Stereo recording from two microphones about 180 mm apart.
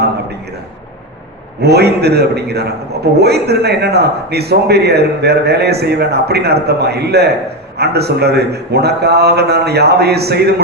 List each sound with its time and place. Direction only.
1.6 s a man's voice: 65° right (ahead or behind)